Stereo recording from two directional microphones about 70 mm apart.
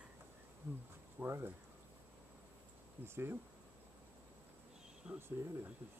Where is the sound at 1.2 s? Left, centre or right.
Right.